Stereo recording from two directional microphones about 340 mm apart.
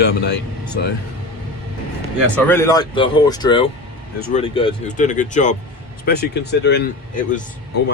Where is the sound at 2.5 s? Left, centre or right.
Centre; by 6.8 s left.